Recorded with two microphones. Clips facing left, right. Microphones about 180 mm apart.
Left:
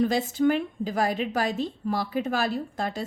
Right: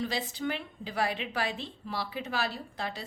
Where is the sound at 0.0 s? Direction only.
45° left (ahead or behind).